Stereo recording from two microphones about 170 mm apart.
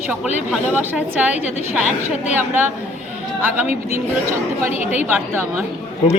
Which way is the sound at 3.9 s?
15° right (ahead or behind).